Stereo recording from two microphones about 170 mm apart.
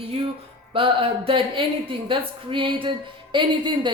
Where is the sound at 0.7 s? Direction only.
30° right (ahead or behind).